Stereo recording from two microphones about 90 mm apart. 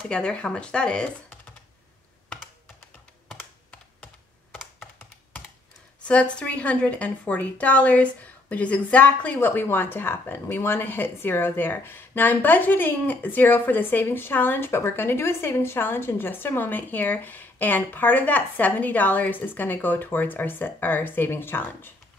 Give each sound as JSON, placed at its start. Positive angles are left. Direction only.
{"t": 0.1, "sound": "speech", "side_deg": 10}
{"t": 3.3, "sound": "computer keyboard", "side_deg": 10}
{"t": 6.0, "sound": "speech", "side_deg": 15}